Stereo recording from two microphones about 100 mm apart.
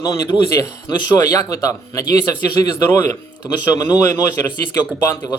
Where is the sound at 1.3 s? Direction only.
35° left (ahead or behind).